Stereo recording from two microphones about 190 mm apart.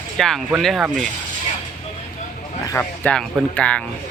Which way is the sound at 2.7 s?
5° left (ahead or behind).